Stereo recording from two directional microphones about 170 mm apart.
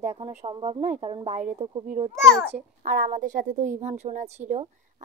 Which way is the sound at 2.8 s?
60° right (ahead or behind).